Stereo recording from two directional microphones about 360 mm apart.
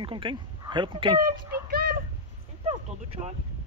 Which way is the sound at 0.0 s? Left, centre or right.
Centre.